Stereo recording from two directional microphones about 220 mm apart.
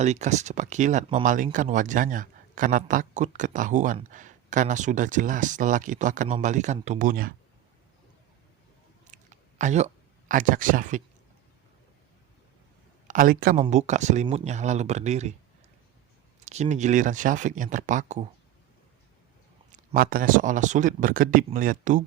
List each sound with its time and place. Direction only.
0.0 s a man's voice: 30° right (ahead or behind)
9.0 s a sound: 35° right (ahead or behind)
13.1 s a man's voice: 40° right (ahead or behind)
16.4 s a man's voice: 30° right (ahead or behind)
19.7 s a man's voice: 40° right (ahead or behind)